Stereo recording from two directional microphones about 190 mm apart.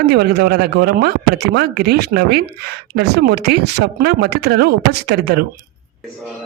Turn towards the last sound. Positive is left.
turn(degrees=-55)  # may be behind; listen again after turning